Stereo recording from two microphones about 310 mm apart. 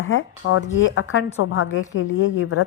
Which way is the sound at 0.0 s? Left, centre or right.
Left.